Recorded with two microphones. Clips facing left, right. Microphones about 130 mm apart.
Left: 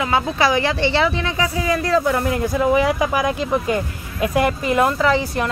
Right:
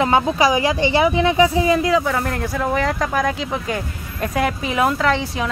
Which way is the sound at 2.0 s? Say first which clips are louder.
Left 3 dB; 5° left (ahead or behind).